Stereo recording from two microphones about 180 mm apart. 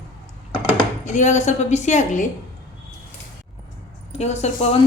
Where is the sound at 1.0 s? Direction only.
45° left (ahead or behind).